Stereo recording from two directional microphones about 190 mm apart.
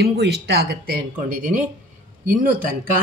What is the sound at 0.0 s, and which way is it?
Speech, 60° right (ahead or behind).